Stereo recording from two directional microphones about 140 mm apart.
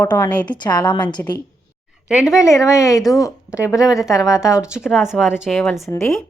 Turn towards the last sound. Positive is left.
turn(degrees=0)  # may be behind; listen again after turning